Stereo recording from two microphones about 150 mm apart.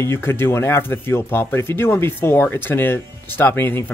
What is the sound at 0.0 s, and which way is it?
Speech, 15° left (ahead or behind).